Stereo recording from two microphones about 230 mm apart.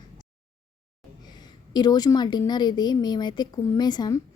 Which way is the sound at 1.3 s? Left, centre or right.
Centre.